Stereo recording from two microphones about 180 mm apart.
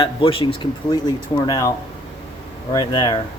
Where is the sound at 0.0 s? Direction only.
30° left (ahead or behind).